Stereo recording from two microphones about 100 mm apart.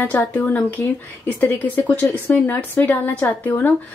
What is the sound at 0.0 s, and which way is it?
A woman's voice, 20° left (ahead or behind).